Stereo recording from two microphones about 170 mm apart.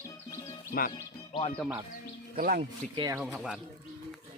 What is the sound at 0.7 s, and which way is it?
Speech, 60° left (ahead or behind).